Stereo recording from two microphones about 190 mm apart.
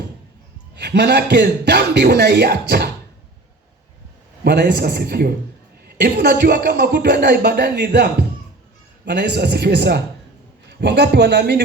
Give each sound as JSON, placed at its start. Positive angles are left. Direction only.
{"t": 0.8, "sound": "speech", "side_deg": -60}
{"t": 4.4, "sound": "speech", "side_deg": -65}